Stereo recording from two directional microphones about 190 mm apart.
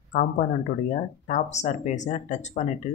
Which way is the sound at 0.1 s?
45° left (ahead or behind).